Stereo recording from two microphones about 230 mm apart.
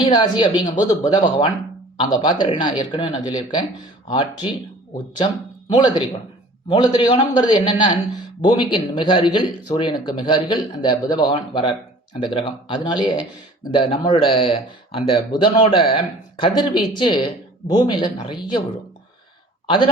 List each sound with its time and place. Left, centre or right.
0.0 s a man's voice: centre
5.6 s a man's voice: centre
19.6 s speech: left